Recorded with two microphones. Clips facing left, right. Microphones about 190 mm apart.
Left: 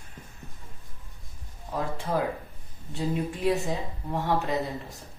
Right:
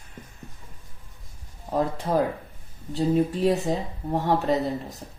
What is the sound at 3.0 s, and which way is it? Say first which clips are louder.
Speech: right 7 dB; 40° right (ahead or behind).